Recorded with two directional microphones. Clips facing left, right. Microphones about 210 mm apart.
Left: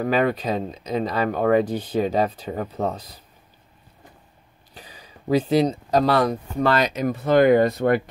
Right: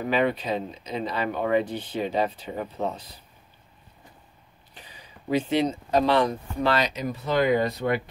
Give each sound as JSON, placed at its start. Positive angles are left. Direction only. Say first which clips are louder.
{"t": 0.0, "sound": "speech", "louder": "left 3 dB", "side_deg": 40}
{"t": 4.7, "sound": "speech", "louder": "left 4 dB", "side_deg": 40}